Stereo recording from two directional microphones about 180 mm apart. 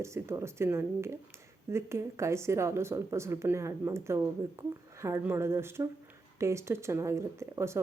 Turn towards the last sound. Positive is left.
turn(degrees=-15)  # may be behind; listen again after turning